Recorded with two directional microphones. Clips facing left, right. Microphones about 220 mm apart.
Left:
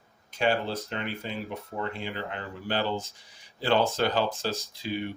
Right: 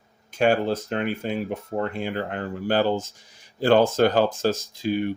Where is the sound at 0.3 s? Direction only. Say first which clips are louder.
Right 6 dB; 50° right (ahead or behind).